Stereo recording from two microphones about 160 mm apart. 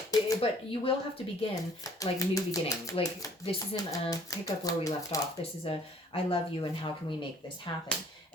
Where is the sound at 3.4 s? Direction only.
40° left (ahead or behind).